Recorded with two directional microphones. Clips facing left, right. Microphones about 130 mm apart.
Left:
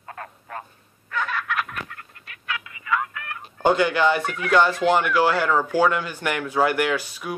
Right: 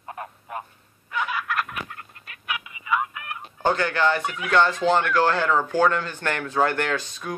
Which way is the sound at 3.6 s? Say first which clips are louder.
Left 3 dB; 10° left (ahead or behind).